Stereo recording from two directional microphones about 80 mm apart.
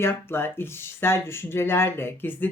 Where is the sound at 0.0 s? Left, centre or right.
Left.